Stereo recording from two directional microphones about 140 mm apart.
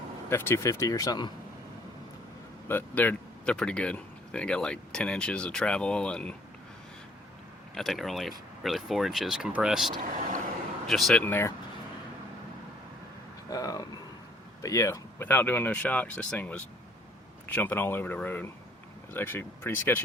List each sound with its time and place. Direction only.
0.3 s speech: 20° left (ahead or behind)
2.6 s speech: 15° left (ahead or behind)
7.8 s speech: centre (ahead or behind)
10.0 s speech: 65° right (ahead or behind)
10.8 s speech: centre (ahead or behind)
11.2 s speech: 15° left (ahead or behind)
13.5 s speech: 25° left (ahead or behind)